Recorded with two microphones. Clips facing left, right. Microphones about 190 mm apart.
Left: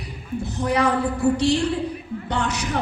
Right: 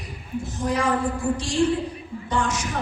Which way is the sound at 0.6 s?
65° left (ahead or behind).